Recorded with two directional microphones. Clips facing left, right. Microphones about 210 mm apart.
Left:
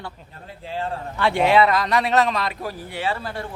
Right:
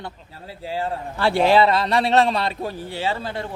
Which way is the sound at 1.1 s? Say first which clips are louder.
Right 1 dB; 35° right (ahead or behind).